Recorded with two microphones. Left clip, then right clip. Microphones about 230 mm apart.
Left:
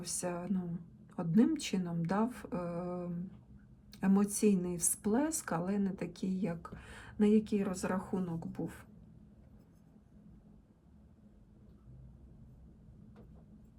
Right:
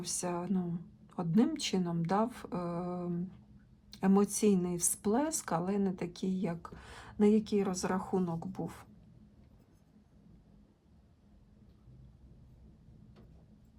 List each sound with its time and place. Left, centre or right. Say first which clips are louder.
0.0 s speech: right 2 dB; centre